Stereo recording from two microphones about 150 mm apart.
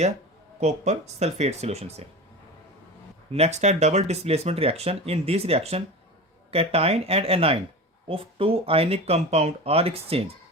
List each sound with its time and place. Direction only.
0.6 s speech: 50° right (ahead or behind)
3.3 s speech: 45° right (ahead or behind)